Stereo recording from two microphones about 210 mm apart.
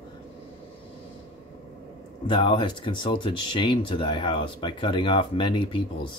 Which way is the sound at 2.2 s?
20° left (ahead or behind).